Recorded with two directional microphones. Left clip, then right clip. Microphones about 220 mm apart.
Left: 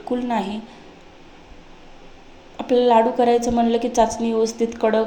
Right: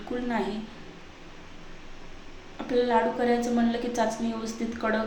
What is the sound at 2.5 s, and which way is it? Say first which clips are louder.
A woman's voice: left 9 dB; 30° left (ahead or behind).